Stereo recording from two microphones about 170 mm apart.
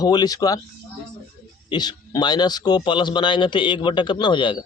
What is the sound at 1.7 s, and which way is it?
Speech, 25° left (ahead or behind).